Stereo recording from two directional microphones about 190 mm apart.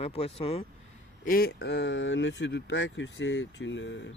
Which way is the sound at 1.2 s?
50° left (ahead or behind).